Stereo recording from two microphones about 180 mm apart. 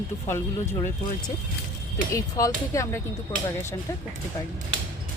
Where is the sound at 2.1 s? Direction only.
20° left (ahead or behind).